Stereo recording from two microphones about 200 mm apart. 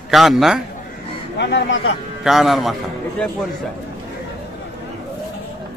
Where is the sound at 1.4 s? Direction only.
60° left (ahead or behind).